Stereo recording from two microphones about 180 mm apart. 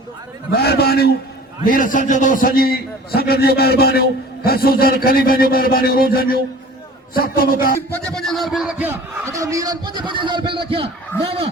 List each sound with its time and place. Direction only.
0.5 s a man's voice: 60° left (ahead or behind)
1.6 s a man's voice: 50° left (ahead or behind)
7.9 s a man's voice: 5° left (ahead or behind); by 10.8 s 30° right (ahead or behind)